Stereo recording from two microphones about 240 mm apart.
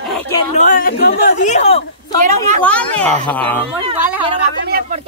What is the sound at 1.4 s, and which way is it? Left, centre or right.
Speech, left.